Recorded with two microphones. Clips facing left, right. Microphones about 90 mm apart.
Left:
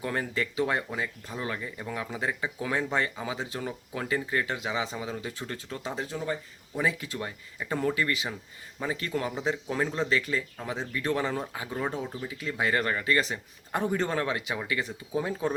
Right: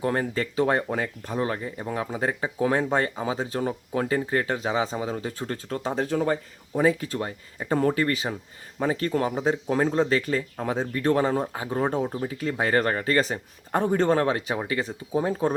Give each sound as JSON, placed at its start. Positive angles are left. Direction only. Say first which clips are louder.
{"t": 0.0, "sound": "speech", "louder": "right 5 dB", "side_deg": -35}
{"t": 6.1, "sound": "speech", "louder": "right 10 dB", "side_deg": -55}
{"t": 6.7, "sound": "speech", "louder": "right 7 dB", "side_deg": -40}